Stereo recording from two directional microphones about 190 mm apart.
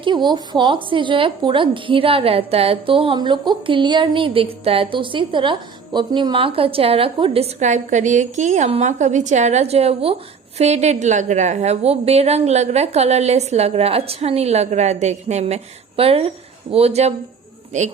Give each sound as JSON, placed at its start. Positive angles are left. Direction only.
{"t": 0.0, "sound": "a woman's voice", "side_deg": -25}